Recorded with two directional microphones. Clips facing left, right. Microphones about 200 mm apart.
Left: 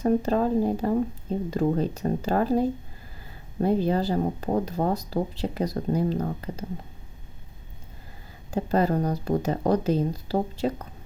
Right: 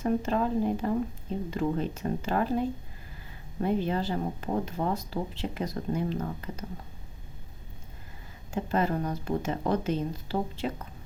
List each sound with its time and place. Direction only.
0.0 s speech: 35° left (ahead or behind)
8.4 s speech: 35° left (ahead or behind)